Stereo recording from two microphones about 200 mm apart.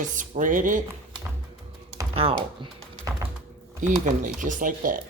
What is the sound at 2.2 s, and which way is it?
Speech, 30° right (ahead or behind).